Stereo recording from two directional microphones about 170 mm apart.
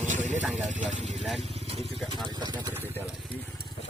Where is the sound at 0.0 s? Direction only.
45° right (ahead or behind).